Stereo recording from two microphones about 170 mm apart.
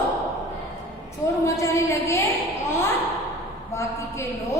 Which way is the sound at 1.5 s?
15° left (ahead or behind).